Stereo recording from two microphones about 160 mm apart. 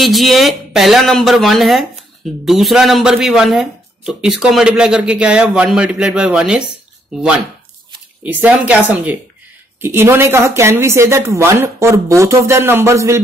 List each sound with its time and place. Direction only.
0.0 s speech: centre (ahead or behind); by 13.2 s 20° right (ahead or behind)